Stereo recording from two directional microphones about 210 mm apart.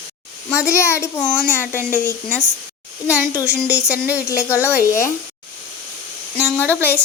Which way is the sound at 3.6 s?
5° right (ahead or behind).